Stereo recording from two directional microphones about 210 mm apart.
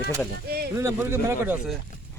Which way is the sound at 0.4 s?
50° right (ahead or behind).